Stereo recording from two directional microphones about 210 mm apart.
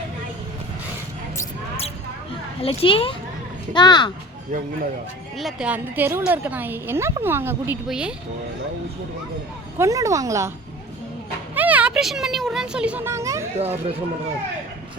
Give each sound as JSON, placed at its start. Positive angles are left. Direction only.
{"t": 2.6, "sound": "a child's voice", "side_deg": 25}
{"t": 5.4, "sound": "a woman's voice", "side_deg": 0}
{"t": 9.7, "sound": "a woman's voice", "side_deg": -15}
{"t": 11.5, "sound": "speech", "side_deg": -5}
{"t": 13.6, "sound": "speech", "side_deg": -30}